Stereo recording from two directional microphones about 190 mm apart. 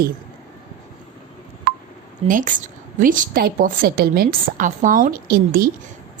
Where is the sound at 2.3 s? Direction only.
45° right (ahead or behind).